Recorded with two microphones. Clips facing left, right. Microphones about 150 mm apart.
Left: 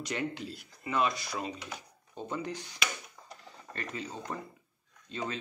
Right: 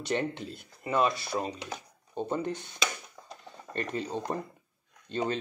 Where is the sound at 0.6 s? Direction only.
30° right (ahead or behind).